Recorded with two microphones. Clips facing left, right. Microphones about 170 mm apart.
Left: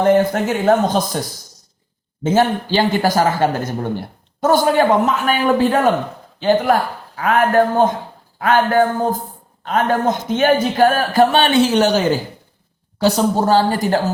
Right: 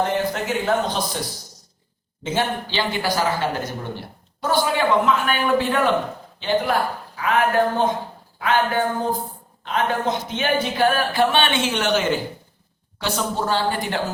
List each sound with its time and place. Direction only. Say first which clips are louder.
0.0 s speech: left 8 dB; 50° left (ahead or behind)
2.2 s speech: left 8 dB; 45° left (ahead or behind)